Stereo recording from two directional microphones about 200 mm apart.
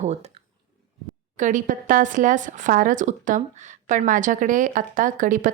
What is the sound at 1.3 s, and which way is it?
A woman's voice, 40° right (ahead or behind).